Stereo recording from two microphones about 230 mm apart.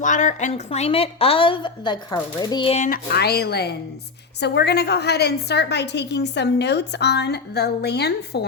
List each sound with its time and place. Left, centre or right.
0.0 s a woman's voice: left